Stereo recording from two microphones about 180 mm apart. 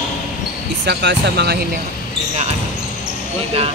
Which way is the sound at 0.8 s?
70° right (ahead or behind).